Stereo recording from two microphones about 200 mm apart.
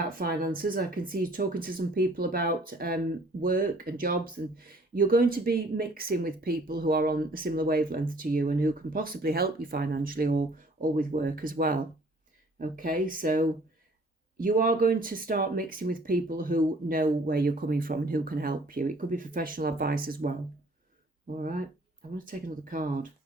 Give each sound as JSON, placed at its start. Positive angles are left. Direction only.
{"t": 0.1, "sound": "speech", "side_deg": -45}
{"t": 21.3, "sound": "speech", "side_deg": -45}